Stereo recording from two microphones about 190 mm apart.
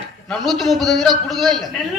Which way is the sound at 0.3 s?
Centre (ahead or behind).